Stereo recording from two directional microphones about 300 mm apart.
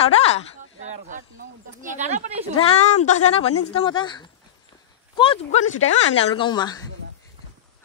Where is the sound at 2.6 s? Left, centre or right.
Left.